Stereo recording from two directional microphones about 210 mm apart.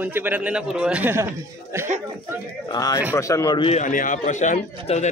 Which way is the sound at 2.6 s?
15° left (ahead or behind).